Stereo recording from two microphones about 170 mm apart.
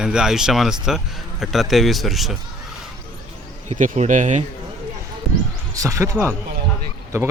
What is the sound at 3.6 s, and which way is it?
Speech, 45° right (ahead or behind).